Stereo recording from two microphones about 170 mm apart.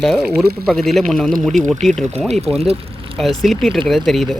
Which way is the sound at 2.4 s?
35° right (ahead or behind).